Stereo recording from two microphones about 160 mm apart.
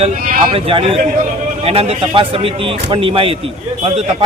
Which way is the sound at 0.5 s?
35° right (ahead or behind).